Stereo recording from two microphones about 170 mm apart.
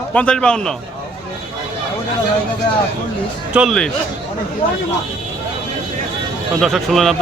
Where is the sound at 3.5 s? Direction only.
Centre (ahead or behind).